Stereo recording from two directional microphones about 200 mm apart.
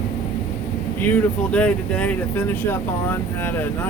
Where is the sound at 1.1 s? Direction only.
5° left (ahead or behind).